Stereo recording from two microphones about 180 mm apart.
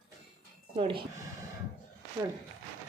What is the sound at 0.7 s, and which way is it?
Speech, 30° right (ahead or behind).